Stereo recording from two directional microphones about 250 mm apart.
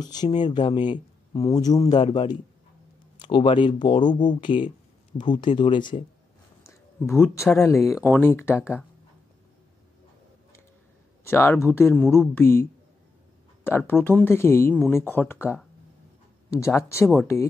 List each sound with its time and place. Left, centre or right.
0.0 s speech: centre
7.1 s speech: centre
11.2 s speech: centre
13.7 s speech: centre
16.5 s speech: centre